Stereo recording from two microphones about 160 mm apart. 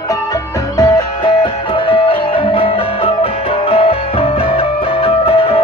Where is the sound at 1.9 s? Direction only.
35° left (ahead or behind).